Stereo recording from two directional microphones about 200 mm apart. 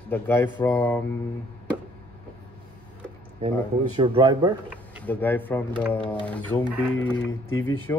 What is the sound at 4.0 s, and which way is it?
Speech, 25° right (ahead or behind).